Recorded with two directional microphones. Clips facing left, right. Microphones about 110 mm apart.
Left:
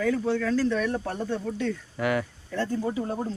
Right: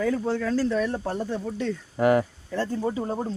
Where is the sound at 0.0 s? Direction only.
30° right (ahead or behind).